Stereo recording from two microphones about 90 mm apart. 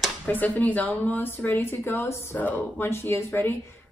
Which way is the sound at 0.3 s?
20° left (ahead or behind).